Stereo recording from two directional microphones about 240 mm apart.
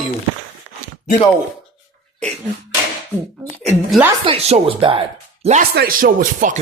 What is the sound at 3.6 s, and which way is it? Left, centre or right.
Speech, centre.